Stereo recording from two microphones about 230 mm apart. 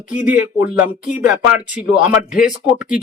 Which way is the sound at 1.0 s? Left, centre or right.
Left.